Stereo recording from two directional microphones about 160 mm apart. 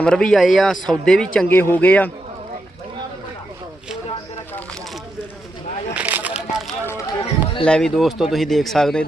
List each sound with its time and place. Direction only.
0.0 s a man's voice: 5° left (ahead or behind)
5.9 s a sound: 10° right (ahead or behind)
6.8 s run: 20° left (ahead or behind)
7.6 s a man's voice: 5° left (ahead or behind)